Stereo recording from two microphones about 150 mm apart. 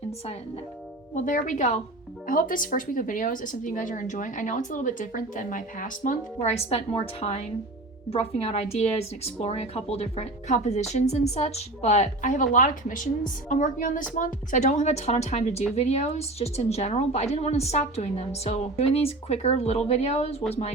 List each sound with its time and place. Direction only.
1.1 s speech: 60° left (ahead or behind)
2.2 s a woman's voice: 65° left (ahead or behind); by 20.4 s 40° left (ahead or behind)